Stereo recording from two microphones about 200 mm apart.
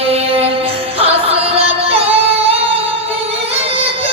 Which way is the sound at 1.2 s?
30° right (ahead or behind).